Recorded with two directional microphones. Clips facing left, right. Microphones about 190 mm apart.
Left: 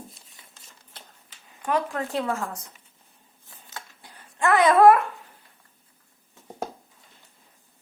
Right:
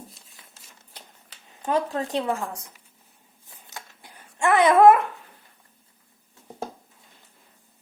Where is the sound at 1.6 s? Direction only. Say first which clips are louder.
Right 1 dB; 25° right (ahead or behind).